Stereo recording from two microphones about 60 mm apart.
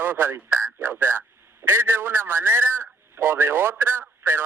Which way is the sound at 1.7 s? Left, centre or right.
Right.